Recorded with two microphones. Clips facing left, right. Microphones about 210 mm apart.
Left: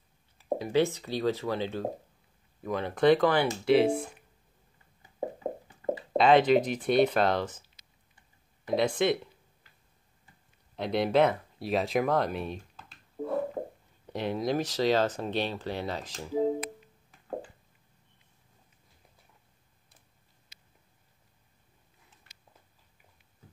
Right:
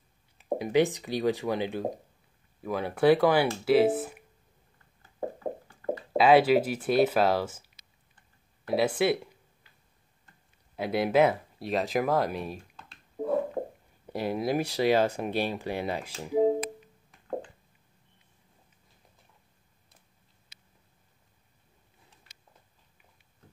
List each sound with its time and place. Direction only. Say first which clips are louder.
0.4 s speech: right 2 dB; 15° right (ahead or behind)
5.8 s a sound: even; 20° left (ahead or behind)
6.1 s speech: right 1 dB; 5° right (ahead or behind)
10.8 s speech: right 1 dB; 5° right (ahead or behind)